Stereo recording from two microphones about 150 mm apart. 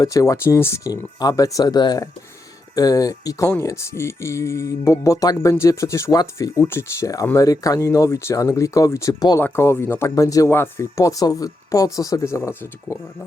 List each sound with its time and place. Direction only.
0.0 s speech: 20° left (ahead or behind)